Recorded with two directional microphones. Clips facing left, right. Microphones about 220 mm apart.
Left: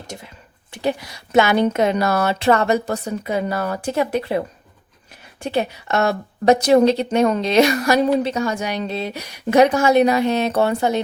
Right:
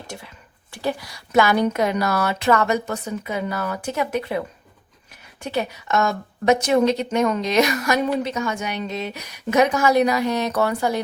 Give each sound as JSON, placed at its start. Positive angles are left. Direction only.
{"t": 0.7, "sound": "a woman's voice", "side_deg": 20}